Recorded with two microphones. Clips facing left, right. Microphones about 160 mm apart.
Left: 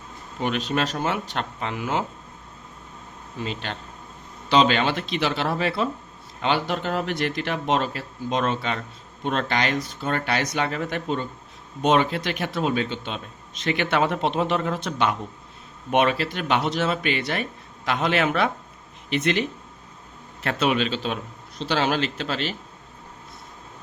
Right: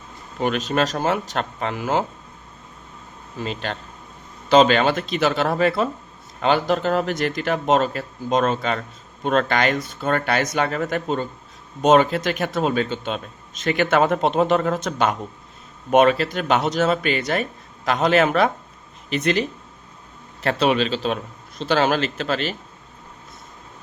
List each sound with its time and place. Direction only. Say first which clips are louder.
0.4 s speech: right 4 dB; 45° right (ahead or behind)
3.4 s a man's voice: right 3 dB; 45° right (ahead or behind)